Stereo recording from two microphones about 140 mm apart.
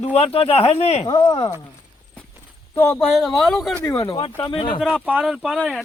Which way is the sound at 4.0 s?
35° left (ahead or behind).